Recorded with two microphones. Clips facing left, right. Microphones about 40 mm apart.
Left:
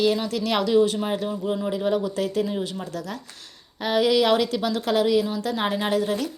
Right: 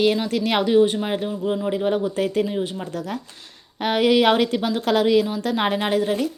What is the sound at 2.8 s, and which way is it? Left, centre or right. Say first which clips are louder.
Speech: right 3 dB; right.